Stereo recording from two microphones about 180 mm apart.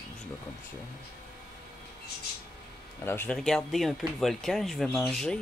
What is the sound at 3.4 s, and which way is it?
Speech, centre (ahead or behind).